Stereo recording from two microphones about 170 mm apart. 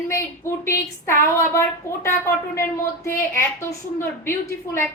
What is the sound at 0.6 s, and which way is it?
A woman's voice, 15° left (ahead or behind).